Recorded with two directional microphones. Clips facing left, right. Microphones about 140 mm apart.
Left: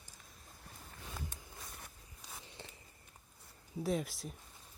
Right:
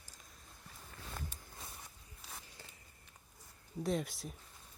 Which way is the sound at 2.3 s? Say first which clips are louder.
Left 3 dB; 25° left (ahead or behind).